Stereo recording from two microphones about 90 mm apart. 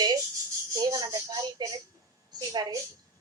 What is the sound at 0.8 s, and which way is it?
A woman's voice, 40° right (ahead or behind).